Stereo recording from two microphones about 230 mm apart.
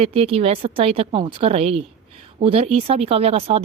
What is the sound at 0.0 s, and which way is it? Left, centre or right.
Speech, right.